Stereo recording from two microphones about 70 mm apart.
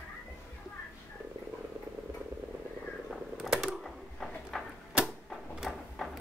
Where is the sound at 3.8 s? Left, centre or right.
Centre.